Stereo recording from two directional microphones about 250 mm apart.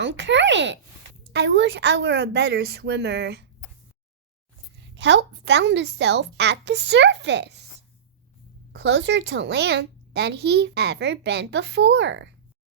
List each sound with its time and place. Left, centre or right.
0.0 s a woman's voice: right
4.9 s a woman's voice: right
8.7 s a woman's voice: right